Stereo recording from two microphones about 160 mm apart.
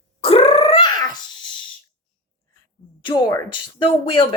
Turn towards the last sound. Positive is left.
turn(degrees=35)  # may be behind; listen again after turning